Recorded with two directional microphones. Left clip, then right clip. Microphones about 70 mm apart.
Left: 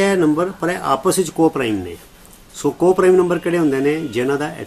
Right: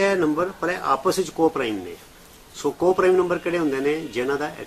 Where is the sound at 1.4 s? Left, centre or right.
Left.